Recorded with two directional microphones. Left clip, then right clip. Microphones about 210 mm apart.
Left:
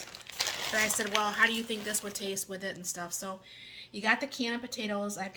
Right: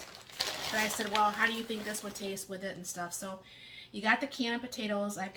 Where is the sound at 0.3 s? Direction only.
45° left (ahead or behind).